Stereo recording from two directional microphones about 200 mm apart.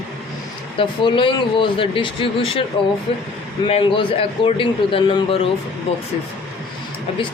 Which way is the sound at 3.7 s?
25° left (ahead or behind).